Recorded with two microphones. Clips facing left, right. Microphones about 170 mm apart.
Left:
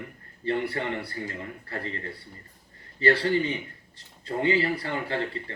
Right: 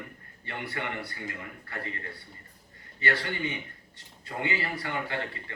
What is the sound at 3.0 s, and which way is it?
Speech, 30° left (ahead or behind).